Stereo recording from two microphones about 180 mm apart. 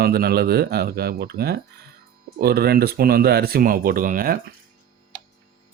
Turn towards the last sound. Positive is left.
turn(degrees=-50)  # may be behind; listen again after turning